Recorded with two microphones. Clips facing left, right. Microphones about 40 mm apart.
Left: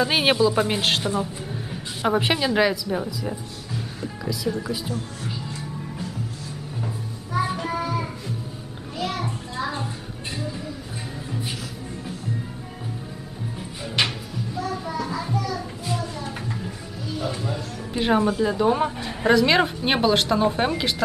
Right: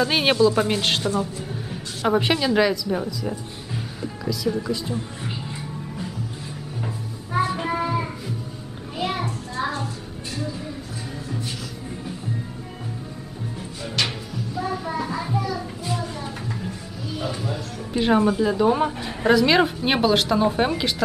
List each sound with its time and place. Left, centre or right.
0.0 s a woman's voice: centre
1.5 s a woman's voice: centre
7.5 s child singing: centre
8.9 s children playing: centre
14.0 s music: centre
14.6 s a sound: centre
15.3 s music: centre
15.9 s a sound: centre
16.4 s music: centre